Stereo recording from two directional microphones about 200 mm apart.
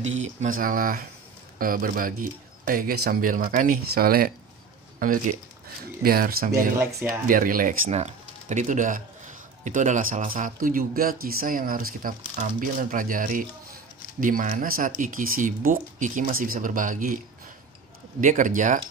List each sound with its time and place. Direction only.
0.2 s speech: 40° right (ahead or behind)
4.9 s a sound: 45° right (ahead or behind)
6.0 s speech: 45° right (ahead or behind)
6.8 s speech: 15° right (ahead or behind)
7.2 s speech: 45° right (ahead or behind)
18.2 s speech: 40° right (ahead or behind)